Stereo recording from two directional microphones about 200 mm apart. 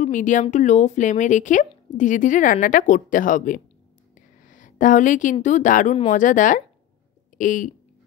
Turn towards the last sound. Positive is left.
turn(degrees=40)  # may be behind; listen again after turning